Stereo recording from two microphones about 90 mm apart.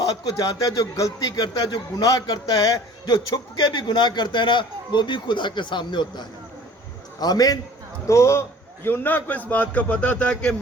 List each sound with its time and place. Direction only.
0.0 s speech: 45° left (ahead or behind)
3.6 s a man's voice: 60° left (ahead or behind)
7.2 s speech: 45° left (ahead or behind)
8.0 s a man's voice: 35° left (ahead or behind); by 10.5 s 15° left (ahead or behind)